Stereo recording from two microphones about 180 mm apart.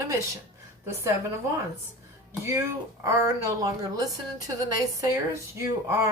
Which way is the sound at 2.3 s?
15° right (ahead or behind).